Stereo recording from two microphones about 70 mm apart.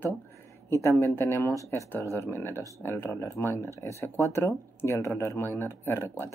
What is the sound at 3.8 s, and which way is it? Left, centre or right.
Speech, left.